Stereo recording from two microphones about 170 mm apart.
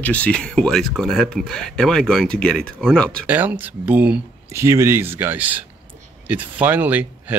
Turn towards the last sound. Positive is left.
turn(degrees=-10)  # may be behind; listen again after turning